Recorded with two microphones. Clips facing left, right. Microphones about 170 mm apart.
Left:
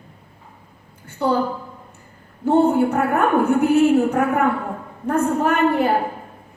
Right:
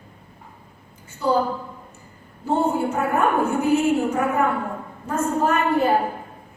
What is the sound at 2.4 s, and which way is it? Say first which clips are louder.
A woman's voice: left 6 dB; 60° left (ahead or behind).